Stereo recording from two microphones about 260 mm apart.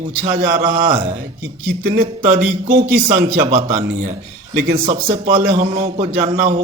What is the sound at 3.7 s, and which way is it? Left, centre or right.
Speech, centre.